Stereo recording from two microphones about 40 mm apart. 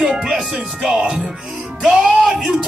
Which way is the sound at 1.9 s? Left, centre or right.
Centre.